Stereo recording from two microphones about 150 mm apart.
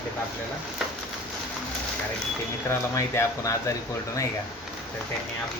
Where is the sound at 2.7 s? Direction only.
15° left (ahead or behind).